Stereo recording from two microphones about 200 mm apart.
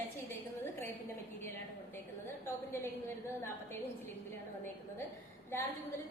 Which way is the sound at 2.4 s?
10° left (ahead or behind).